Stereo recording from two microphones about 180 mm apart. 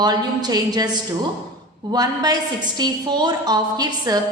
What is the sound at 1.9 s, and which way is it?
A woman's voice, 20° right (ahead or behind).